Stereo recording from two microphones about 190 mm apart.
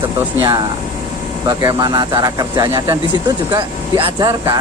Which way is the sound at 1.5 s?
20° right (ahead or behind).